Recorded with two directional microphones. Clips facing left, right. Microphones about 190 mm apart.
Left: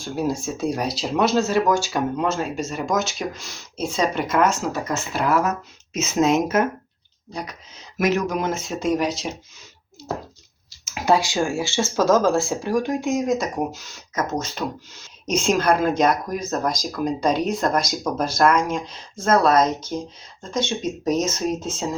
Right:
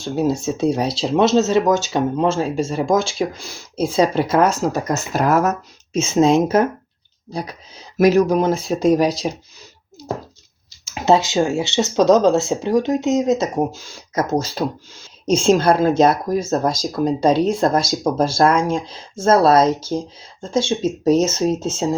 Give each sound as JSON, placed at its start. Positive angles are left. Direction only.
{"t": 0.0, "sound": "speech", "side_deg": -25}
{"t": 7.9, "sound": "speech", "side_deg": -35}
{"t": 10.8, "sound": "speech", "side_deg": -25}